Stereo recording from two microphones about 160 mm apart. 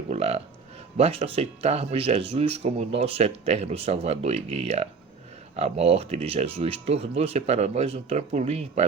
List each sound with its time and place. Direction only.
0.1 s speech: 40° right (ahead or behind)